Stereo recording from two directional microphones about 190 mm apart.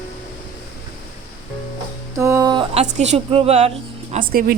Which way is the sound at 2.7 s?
35° right (ahead or behind).